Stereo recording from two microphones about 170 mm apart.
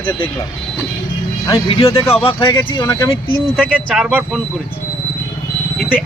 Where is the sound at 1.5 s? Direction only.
30° left (ahead or behind).